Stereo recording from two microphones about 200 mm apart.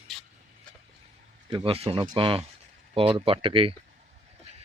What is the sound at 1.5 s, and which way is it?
Speech, 25° right (ahead or behind).